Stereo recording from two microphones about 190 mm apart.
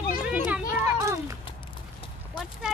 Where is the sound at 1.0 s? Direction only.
15° right (ahead or behind).